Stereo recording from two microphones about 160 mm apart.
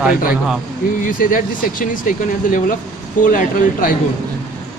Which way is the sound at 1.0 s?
60° left (ahead or behind).